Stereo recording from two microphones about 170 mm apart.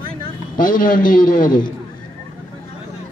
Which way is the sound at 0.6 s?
55° left (ahead or behind).